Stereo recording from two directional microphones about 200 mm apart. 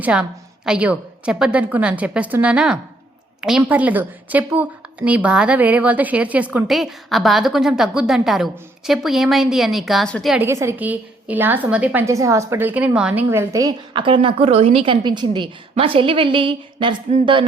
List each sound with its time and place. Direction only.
0.0 s a woman's voice: 5° right (ahead or behind)
10.4 s a woman's voice: 15° right (ahead or behind)